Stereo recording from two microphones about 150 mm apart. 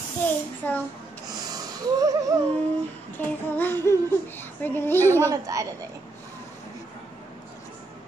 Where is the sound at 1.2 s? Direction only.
25° right (ahead or behind).